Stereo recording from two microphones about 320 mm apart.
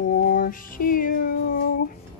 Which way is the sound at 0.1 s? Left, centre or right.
Left.